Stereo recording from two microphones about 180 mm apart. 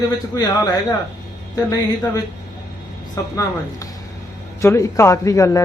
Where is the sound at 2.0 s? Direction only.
20° left (ahead or behind).